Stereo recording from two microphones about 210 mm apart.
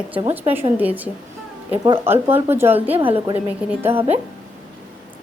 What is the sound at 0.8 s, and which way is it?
Speech, 10° right (ahead or behind).